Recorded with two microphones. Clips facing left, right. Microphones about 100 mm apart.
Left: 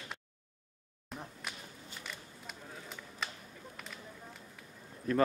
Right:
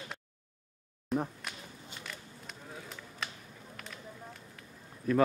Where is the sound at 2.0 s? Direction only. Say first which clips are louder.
Even; centre (ahead or behind).